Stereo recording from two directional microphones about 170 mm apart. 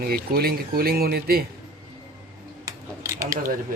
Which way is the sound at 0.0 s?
65° right (ahead or behind).